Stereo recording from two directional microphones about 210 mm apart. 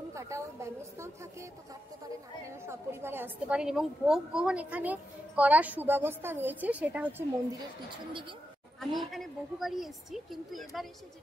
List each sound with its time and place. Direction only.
0.1 s a woman's voice: 15° right (ahead or behind)
2.6 s a woman's voice: 10° right (ahead or behind)
7.9 s speech: 25° right (ahead or behind)
8.7 s a woman's voice: centre (ahead or behind)